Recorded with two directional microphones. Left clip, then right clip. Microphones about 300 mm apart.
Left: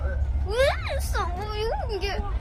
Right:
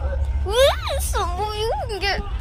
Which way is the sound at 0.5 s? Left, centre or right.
Centre.